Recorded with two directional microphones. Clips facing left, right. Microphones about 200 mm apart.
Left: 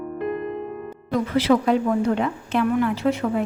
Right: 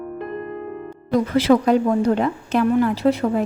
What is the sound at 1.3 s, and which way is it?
Speech, 45° right (ahead or behind).